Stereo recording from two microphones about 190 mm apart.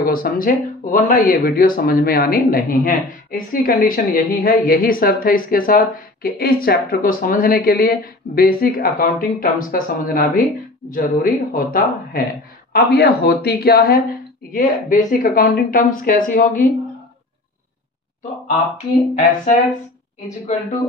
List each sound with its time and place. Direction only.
0.0 s speech: 50° left (ahead or behind)
19.1 s speech: 40° left (ahead or behind)